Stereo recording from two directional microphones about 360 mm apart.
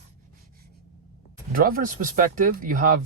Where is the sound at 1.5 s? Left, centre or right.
Right.